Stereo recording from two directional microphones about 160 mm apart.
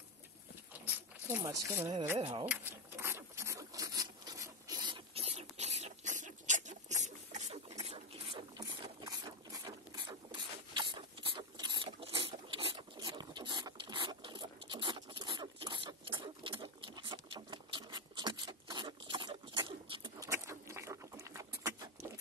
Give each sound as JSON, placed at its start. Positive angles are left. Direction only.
{"t": 1.2, "sound": "speech", "side_deg": -20}
{"t": 2.1, "sound": "speech", "side_deg": -35}
{"t": 2.4, "sound": "rub", "side_deg": -10}
{"t": 8.5, "sound": "a sound", "side_deg": -25}